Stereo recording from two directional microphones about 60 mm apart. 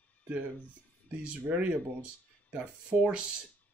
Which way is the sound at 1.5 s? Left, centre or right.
Right.